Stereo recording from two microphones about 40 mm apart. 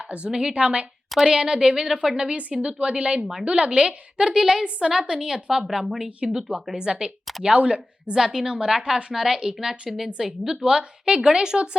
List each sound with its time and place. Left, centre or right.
0.0 s a woman's voice: right
1.2 s a woman's voice: centre
4.4 s a woman's voice: centre
4.8 s a woman's voice: right
5.6 s speech: centre
6.1 s a woman's voice: right
6.3 s a woman's voice: centre
6.7 s a woman's voice: right
8.1 s a woman's voice: centre